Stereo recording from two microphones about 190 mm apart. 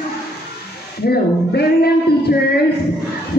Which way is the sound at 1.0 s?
55° left (ahead or behind).